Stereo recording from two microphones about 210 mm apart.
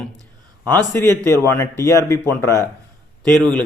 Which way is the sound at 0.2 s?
15° right (ahead or behind).